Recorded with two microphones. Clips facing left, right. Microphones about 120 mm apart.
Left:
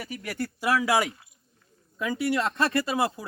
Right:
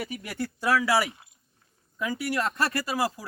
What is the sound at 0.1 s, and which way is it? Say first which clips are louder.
Speech: left 1 dB; 15° right (ahead or behind).